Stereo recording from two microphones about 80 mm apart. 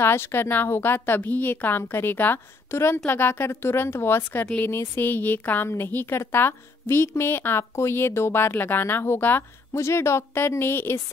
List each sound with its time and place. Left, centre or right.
0.0 s a woman's voice: left